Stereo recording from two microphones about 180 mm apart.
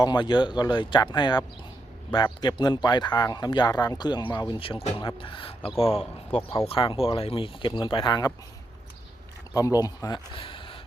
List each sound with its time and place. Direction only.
0.0 s speech: 25° left (ahead or behind)
9.6 s speech: 20° left (ahead or behind)